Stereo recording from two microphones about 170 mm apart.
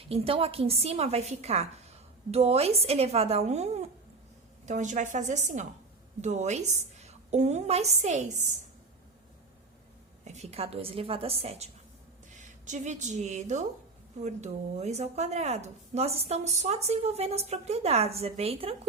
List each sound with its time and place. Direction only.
0.1 s a woman's voice: 35° right (ahead or behind)
10.2 s speech: 40° right (ahead or behind)